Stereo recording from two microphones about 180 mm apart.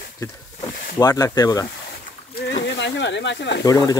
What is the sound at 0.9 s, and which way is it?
Speech, 20° left (ahead or behind).